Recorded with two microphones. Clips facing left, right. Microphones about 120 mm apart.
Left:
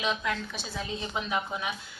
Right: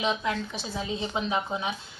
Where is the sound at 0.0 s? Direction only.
20° right (ahead or behind).